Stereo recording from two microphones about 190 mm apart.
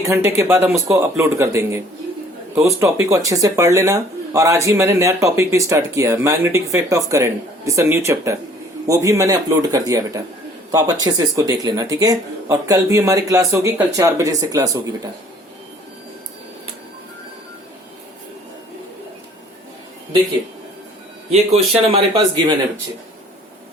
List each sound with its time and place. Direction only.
0.1 s speech: 15° right (ahead or behind)
21.9 s speech: 30° right (ahead or behind)